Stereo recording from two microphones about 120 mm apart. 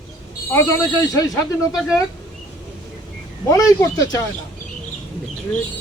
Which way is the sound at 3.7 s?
30° left (ahead or behind).